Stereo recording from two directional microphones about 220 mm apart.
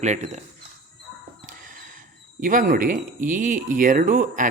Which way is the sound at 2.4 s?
35° right (ahead or behind).